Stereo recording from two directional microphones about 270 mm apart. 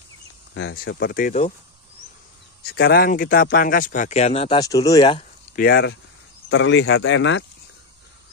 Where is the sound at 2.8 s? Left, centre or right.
Left; by 5.3 s centre.